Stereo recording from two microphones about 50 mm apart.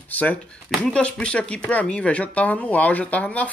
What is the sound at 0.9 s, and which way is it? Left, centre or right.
Speech, left.